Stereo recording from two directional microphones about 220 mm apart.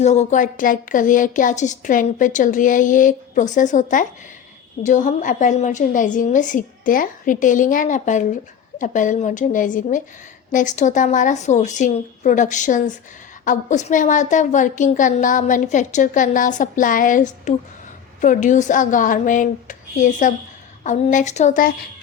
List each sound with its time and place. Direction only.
0.0 s a woman's voice: 30° left (ahead or behind)